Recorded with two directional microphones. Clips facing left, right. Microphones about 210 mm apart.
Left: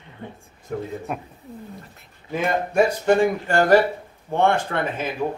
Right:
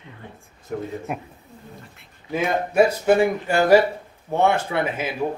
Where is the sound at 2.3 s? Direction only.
5° right (ahead or behind).